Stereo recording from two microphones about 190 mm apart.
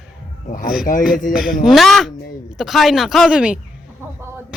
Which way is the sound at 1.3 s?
Centre (ahead or behind).